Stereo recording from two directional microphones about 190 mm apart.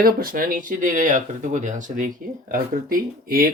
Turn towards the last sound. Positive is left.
turn(degrees=-50)  # may be behind; listen again after turning